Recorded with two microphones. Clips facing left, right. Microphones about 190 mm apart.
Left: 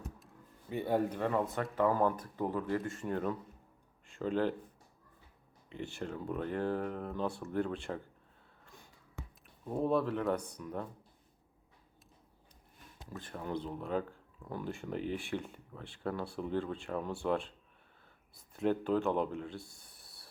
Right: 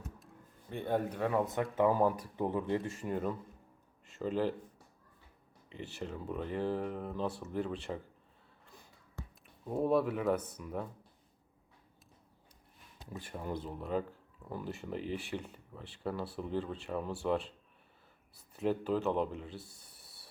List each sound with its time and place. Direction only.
0.7 s speech: 5° left (ahead or behind)
1.1 s speech: 5° right (ahead or behind)
2.3 s speech: 20° right (ahead or behind)
2.9 s speech: 10° right (ahead or behind)
5.6 s speech: centre (ahead or behind)
9.6 s speech: 5° right (ahead or behind)
13.1 s speech: 10° right (ahead or behind)
18.5 s speech: centre (ahead or behind)